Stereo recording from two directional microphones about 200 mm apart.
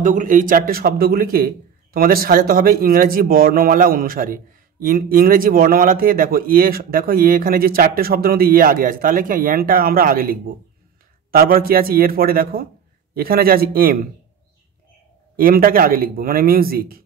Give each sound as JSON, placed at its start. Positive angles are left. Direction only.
{"t": 0.0, "sound": "speech", "side_deg": -40}
{"t": 11.3, "sound": "speech", "side_deg": -50}
{"t": 15.3, "sound": "speech", "side_deg": -45}